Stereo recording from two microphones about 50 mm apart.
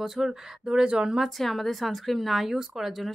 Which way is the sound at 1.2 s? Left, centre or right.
Centre.